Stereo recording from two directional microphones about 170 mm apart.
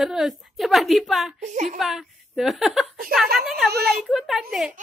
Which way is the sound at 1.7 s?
Centre (ahead or behind).